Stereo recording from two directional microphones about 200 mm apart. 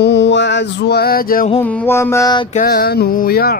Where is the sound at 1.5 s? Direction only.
10° left (ahead or behind).